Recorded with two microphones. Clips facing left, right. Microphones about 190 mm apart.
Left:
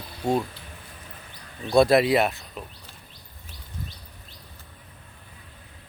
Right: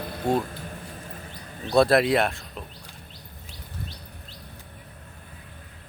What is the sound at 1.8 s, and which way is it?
Speech, centre (ahead or behind).